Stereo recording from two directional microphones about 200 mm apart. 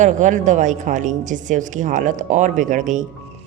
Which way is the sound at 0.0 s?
40° right (ahead or behind).